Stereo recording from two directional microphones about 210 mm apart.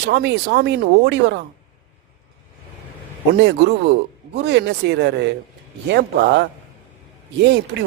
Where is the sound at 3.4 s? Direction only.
55° right (ahead or behind).